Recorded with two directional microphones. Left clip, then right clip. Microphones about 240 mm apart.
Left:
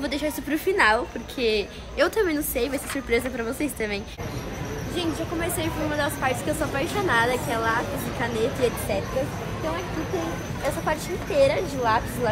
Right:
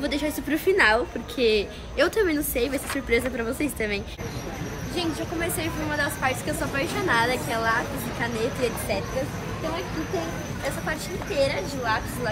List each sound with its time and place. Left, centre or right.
0.0 s speech: centre
5.4 s speech: centre
10.9 s a woman's voice: left